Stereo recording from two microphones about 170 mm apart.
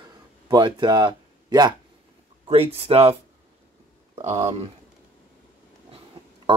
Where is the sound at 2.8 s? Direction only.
35° right (ahead or behind).